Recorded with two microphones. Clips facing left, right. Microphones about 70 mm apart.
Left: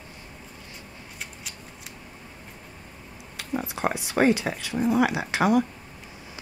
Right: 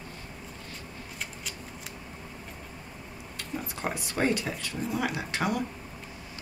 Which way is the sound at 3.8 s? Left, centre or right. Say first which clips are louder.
Left 6 dB; centre.